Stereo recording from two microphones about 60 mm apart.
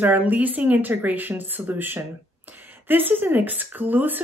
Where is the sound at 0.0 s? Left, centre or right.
Right.